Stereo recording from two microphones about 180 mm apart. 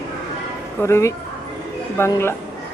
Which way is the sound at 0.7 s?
15° left (ahead or behind).